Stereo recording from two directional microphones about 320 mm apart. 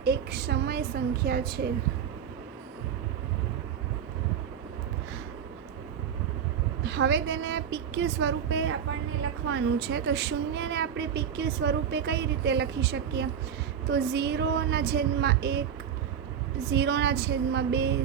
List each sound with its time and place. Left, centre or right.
0.0 s a woman's voice: right
6.8 s a woman's voice: right
16.6 s a woman's voice: right